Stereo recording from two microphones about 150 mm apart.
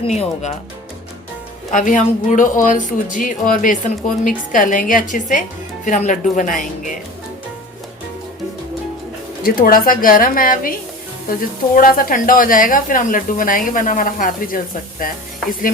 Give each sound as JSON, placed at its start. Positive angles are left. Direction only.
{"t": 0.1, "sound": "speech", "side_deg": 50}
{"t": 1.7, "sound": "speech", "side_deg": 60}
{"t": 9.4, "sound": "a woman's voice", "side_deg": 75}